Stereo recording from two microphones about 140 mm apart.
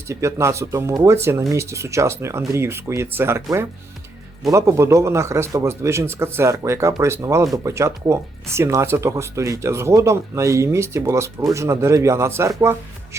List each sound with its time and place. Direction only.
0.1 s speech: 20° right (ahead or behind)